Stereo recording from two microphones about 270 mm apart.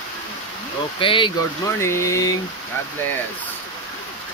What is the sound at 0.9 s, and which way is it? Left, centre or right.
Speech, centre.